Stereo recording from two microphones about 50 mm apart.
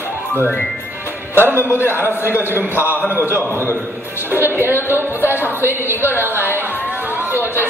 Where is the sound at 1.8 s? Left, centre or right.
Left.